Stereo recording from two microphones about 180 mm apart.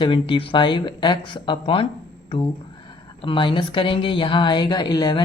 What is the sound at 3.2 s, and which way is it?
Speech, 30° left (ahead or behind).